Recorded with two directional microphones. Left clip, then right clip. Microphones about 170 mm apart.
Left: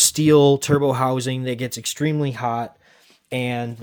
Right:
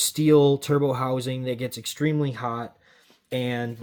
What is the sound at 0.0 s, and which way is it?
Speech, 50° left (ahead or behind).